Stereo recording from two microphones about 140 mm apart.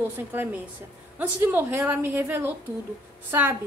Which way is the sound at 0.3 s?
15° right (ahead or behind).